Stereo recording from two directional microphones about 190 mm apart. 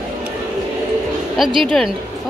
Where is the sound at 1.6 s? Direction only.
Centre (ahead or behind).